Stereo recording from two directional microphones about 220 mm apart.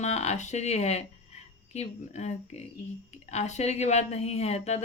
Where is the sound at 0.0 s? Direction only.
30° left (ahead or behind).